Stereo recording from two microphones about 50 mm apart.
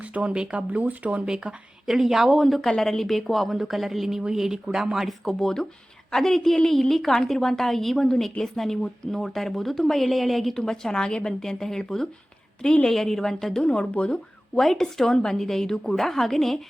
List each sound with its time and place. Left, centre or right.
0.0 s speech: right
1.2 s a woman's voice: centre
5.2 s a woman's voice: centre
10.6 s a woman's voice: centre
12.8 s a woman's voice: centre
14.5 s a woman's voice: centre